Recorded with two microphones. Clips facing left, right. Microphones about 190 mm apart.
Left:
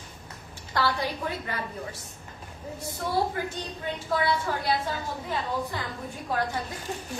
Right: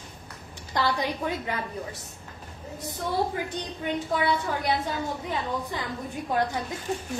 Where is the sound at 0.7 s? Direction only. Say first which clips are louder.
Right 1 dB; 15° right (ahead or behind).